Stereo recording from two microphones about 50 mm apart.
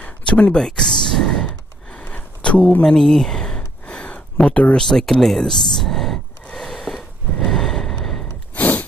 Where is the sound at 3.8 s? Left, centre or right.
Left.